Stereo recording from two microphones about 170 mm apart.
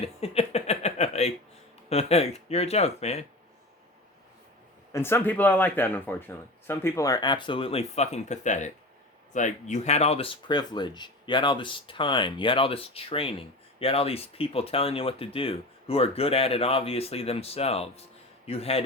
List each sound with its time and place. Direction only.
0.0 s a sound: 35° left (ahead or behind)
1.9 s speech: 40° left (ahead or behind)
4.9 s speech: 15° left (ahead or behind); by 18.8 s 35° left (ahead or behind)